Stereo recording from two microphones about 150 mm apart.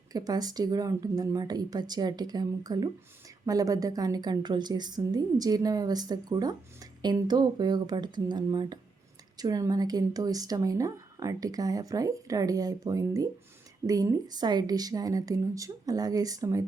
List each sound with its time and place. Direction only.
0.1 s a woman's voice: 25° right (ahead or behind)